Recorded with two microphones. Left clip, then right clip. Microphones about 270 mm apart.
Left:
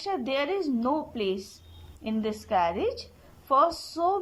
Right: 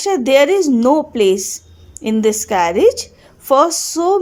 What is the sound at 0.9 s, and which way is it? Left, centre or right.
Speech, centre.